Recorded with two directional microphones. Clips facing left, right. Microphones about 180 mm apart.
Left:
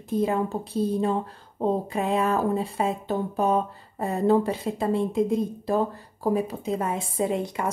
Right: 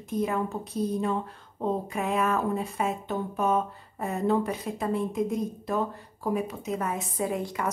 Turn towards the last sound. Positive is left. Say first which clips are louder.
# left 3 dB
turn(degrees=25)  # may be behind; listen again after turning